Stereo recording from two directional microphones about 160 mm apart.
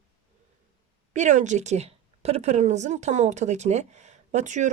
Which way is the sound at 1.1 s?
50° right (ahead or behind).